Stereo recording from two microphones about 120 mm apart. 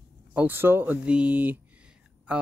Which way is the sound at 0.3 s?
15° right (ahead or behind).